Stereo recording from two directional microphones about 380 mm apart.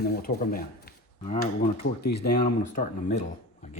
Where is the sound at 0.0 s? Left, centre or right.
Left.